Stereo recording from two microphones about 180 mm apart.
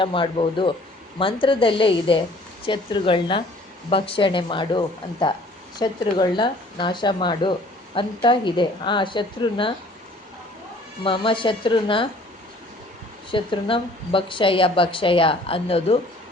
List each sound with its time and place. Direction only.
0.0 s a woman's voice: 30° left (ahead or behind)
11.0 s a woman's voice: 30° left (ahead or behind)
13.3 s a woman's voice: 30° left (ahead or behind)